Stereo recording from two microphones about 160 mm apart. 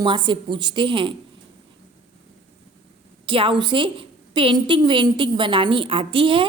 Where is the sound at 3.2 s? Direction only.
30° right (ahead or behind).